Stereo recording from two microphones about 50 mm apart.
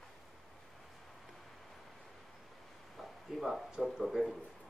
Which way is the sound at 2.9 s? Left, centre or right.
Centre.